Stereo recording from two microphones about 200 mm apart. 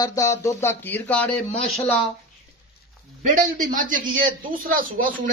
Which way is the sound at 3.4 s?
40° right (ahead or behind).